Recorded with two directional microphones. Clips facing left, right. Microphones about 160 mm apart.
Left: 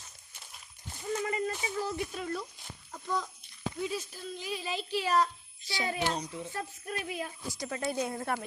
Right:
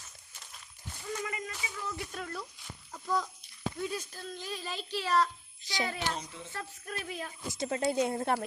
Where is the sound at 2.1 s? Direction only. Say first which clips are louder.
Left 4 dB; 5° left (ahead or behind).